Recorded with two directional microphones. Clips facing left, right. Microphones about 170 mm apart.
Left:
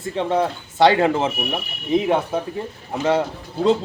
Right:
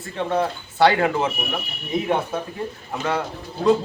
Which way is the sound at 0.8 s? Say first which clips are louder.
Left 2 dB; 25° left (ahead or behind).